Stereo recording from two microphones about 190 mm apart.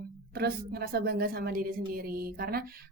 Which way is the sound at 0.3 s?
55° right (ahead or behind).